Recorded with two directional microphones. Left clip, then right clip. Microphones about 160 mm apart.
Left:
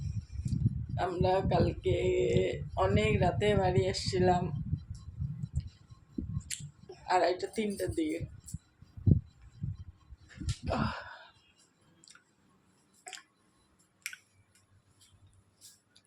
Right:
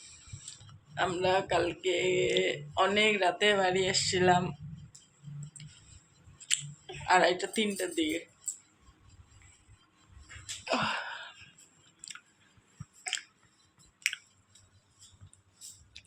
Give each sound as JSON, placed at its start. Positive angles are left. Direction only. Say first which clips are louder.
{"t": 0.9, "sound": "speech", "louder": "right 2 dB", "side_deg": 5}
{"t": 6.5, "sound": "a sound", "louder": "right 11 dB", "side_deg": 5}
{"t": 7.1, "sound": "speech", "louder": "right 3 dB", "side_deg": 5}
{"t": 10.7, "sound": "a sound", "louder": "right 4 dB", "side_deg": 10}
{"t": 12.1, "sound": "chewing", "louder": "right 11 dB", "side_deg": 5}
{"t": 14.0, "sound": "squish", "louder": "right 10 dB", "side_deg": 5}
{"t": 15.9, "sound": "music", "louder": "right 12 dB", "side_deg": 5}